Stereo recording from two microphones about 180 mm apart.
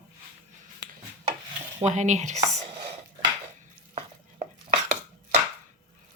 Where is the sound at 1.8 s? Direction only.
40° right (ahead or behind).